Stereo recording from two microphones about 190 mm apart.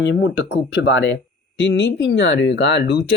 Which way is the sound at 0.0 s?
75° left (ahead or behind).